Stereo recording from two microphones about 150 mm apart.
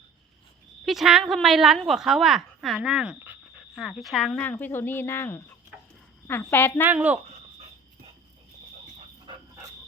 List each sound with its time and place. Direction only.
0.9 s a woman's voice: centre (ahead or behind); by 6.8 s 15° left (ahead or behind)
6.8 s speech: 10° right (ahead or behind)
9.3 s dog: 30° right (ahead or behind)